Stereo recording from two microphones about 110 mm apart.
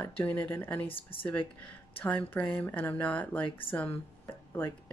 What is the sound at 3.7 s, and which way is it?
Speech, 20° left (ahead or behind).